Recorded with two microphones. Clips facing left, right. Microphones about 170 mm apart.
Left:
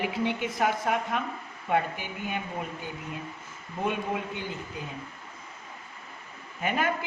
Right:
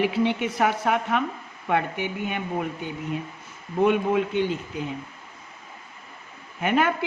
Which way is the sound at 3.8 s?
70° right (ahead or behind).